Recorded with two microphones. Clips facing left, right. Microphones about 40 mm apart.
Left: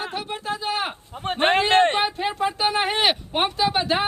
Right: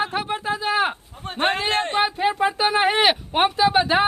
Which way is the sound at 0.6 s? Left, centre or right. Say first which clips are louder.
Right 6 dB; centre.